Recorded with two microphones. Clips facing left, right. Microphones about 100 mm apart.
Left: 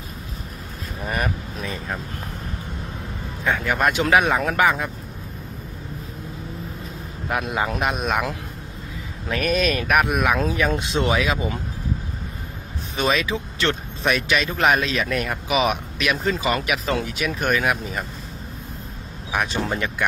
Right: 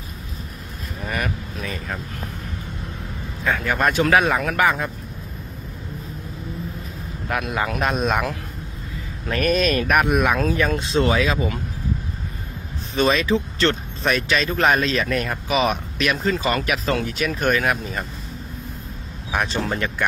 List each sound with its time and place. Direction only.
1.6 s speech: 20° left (ahead or behind)
3.6 s speech: 15° left (ahead or behind)
7.2 s speech: 20° left (ahead or behind); by 10.4 s 5° left (ahead or behind)
10.7 s speech: 20° left (ahead or behind)
12.9 s speech: 10° left (ahead or behind)
19.3 s speech: 10° left (ahead or behind)